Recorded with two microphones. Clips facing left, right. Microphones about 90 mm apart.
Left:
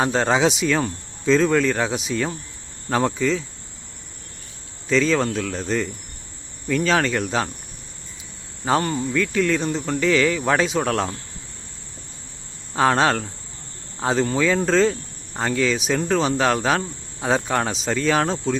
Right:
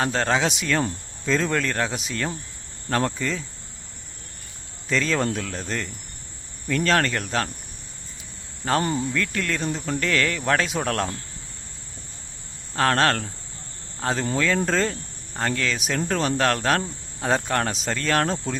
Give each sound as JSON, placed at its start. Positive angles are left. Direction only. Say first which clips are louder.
{"t": 0.0, "sound": "speech", "louder": "left 4 dB", "side_deg": 10}
{"t": 4.9, "sound": "speech", "louder": "left 4 dB", "side_deg": 0}
{"t": 8.6, "sound": "speech", "louder": "left 2 dB", "side_deg": 10}
{"t": 12.7, "sound": "speech", "louder": "left 3 dB", "side_deg": 10}